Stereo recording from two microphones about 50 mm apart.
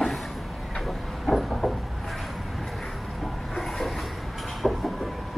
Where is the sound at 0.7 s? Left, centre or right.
Centre.